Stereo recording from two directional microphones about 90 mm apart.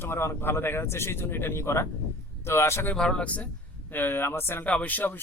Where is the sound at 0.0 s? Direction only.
30° left (ahead or behind).